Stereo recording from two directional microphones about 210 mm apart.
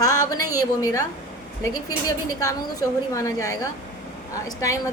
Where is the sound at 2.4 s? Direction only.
15° left (ahead or behind).